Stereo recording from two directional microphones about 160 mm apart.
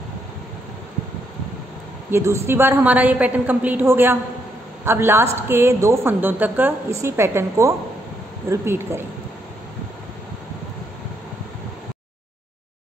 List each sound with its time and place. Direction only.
2.0 s a woman's voice: 15° right (ahead or behind)